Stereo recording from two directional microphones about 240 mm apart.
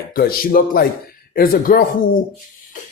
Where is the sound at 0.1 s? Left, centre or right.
Left.